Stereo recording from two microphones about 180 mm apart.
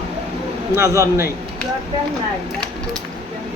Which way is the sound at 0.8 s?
15° right (ahead or behind).